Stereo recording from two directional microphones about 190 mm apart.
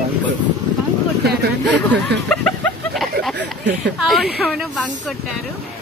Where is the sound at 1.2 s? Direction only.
60° right (ahead or behind).